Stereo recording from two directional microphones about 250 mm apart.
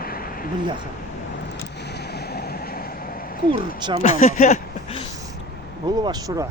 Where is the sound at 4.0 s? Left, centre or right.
Left.